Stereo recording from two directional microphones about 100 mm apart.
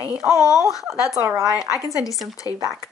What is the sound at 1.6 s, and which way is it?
Speech, 35° left (ahead or behind).